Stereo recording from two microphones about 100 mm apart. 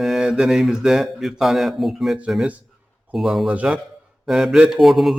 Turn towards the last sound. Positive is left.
turn(degrees=0)  # may be behind; listen again after turning